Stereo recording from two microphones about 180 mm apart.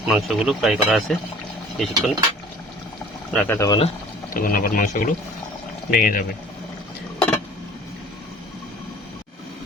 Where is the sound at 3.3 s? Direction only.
10° left (ahead or behind).